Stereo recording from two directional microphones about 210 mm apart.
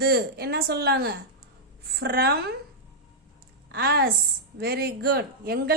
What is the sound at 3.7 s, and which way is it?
A woman's voice, 50° right (ahead or behind).